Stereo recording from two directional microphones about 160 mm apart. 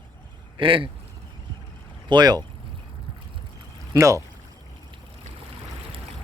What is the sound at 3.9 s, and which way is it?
Speech, 20° right (ahead or behind).